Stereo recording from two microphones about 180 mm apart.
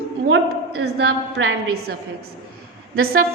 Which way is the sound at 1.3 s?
75° right (ahead or behind).